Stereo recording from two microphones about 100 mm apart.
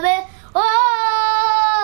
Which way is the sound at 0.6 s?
5° right (ahead or behind).